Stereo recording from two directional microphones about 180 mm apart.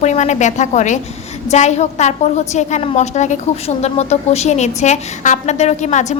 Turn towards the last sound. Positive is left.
turn(degrees=40)  # may be behind; listen again after turning